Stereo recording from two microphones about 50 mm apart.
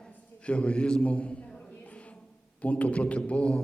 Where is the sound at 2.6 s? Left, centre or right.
Left.